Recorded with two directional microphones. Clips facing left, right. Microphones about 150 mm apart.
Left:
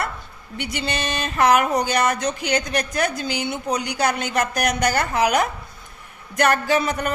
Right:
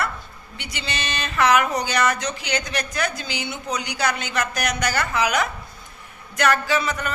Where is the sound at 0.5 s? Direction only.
55° left (ahead or behind).